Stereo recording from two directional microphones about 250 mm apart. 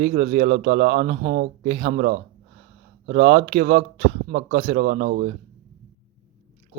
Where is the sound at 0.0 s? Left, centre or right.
Right.